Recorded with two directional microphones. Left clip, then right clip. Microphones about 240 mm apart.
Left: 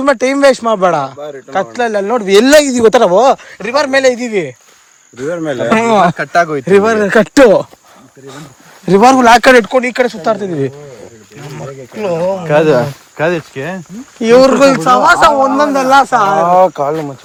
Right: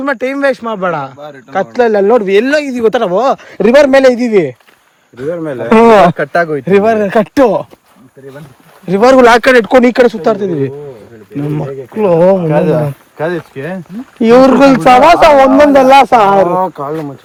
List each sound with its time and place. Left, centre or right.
0.0 s speech: centre
2.2 s speech: centre
3.6 s a man's voice: centre
8.9 s a man's voice: centre
9.6 s speech: centre
12.5 s speech: left
14.2 s a man's voice: centre
16.6 s speech: left